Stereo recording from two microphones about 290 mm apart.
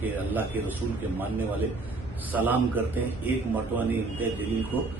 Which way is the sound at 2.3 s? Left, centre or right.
Centre.